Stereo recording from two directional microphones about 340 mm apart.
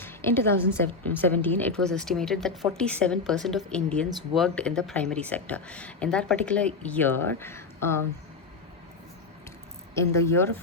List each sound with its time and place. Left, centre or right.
0.0 s a woman's voice: centre
10.0 s speech: centre